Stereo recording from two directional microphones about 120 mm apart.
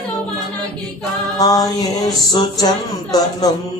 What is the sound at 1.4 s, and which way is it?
Music, 30° left (ahead or behind).